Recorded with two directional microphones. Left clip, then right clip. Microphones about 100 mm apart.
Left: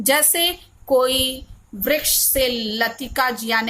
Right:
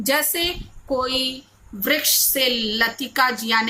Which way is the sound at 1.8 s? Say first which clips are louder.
Even; 25° left (ahead or behind).